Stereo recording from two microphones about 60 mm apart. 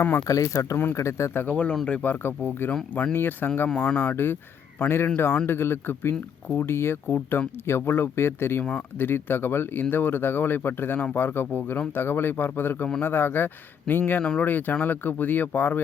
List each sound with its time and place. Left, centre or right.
0.3 s speech: left
1.5 s speech: left
2.2 s speech: left
14.2 s speech: left